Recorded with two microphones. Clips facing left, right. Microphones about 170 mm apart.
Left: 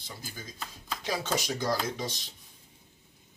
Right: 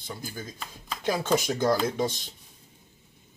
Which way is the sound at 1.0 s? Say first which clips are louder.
Right 6 dB; 50° right (ahead or behind).